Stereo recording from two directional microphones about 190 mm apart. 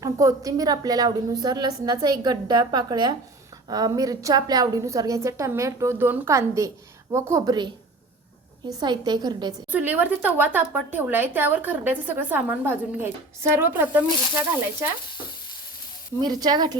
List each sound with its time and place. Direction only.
0.0 s a woman's voice: 15° right (ahead or behind)
9.7 s speech: 10° right (ahead or behind)
16.2 s a woman's voice: 20° right (ahead or behind)